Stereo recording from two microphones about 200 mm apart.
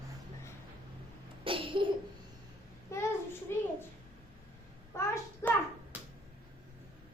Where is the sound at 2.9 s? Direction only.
15° left (ahead or behind).